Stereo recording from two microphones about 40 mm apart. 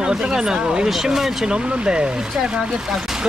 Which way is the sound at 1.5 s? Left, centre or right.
Right.